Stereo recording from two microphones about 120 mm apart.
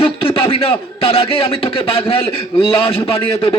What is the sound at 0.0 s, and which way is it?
A man's voice, 50° left (ahead or behind).